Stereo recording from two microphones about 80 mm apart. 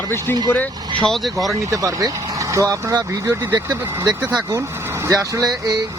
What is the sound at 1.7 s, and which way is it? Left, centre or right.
Speech, right.